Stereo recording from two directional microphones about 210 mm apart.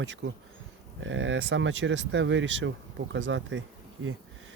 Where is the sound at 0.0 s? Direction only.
60° right (ahead or behind).